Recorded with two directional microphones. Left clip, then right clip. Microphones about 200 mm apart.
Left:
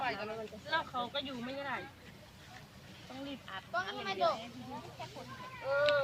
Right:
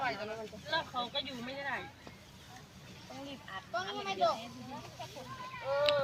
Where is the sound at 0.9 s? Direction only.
10° right (ahead or behind).